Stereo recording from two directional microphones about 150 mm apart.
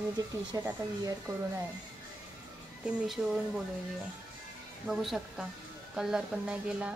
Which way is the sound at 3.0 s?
Centre (ahead or behind).